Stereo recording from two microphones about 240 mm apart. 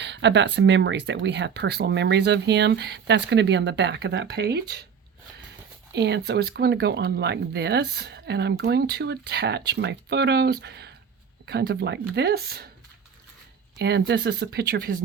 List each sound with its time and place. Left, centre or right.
0.0 s speech: right
5.9 s speech: right
13.7 s speech: right